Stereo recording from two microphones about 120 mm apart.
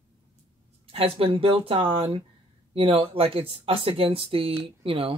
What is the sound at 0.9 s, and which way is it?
Speech, 55° right (ahead or behind).